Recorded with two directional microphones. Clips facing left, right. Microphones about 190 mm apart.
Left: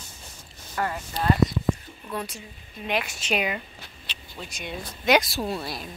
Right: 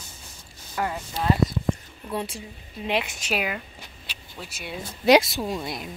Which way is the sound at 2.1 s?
30° right (ahead or behind).